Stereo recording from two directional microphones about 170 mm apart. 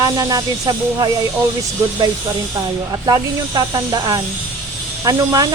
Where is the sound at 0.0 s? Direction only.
20° right (ahead or behind).